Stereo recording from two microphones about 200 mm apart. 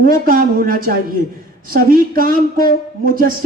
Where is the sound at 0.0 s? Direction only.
45° right (ahead or behind).